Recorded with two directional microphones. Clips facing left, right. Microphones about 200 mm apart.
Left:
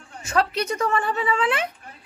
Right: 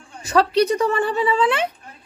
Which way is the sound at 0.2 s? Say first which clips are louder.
Right 6 dB; 35° right (ahead or behind).